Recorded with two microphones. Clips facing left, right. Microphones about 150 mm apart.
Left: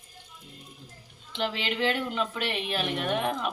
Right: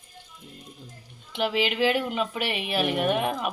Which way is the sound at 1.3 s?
10° right (ahead or behind).